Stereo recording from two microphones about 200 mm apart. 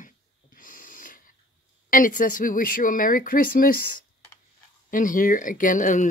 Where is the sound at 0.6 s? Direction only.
40° left (ahead or behind).